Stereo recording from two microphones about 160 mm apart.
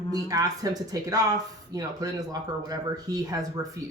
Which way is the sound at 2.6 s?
25° right (ahead or behind).